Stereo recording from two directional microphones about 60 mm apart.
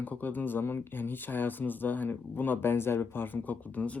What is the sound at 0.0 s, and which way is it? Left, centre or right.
Speech, left.